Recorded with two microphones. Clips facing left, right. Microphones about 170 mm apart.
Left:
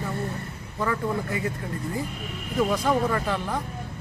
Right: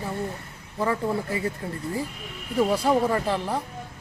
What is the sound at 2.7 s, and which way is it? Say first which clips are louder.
Speech: right 2 dB; 30° right (ahead or behind).